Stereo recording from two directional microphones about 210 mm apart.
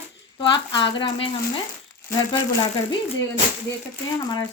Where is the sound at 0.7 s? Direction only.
20° left (ahead or behind).